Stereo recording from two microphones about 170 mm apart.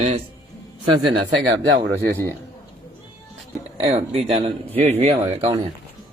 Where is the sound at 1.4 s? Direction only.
90° right.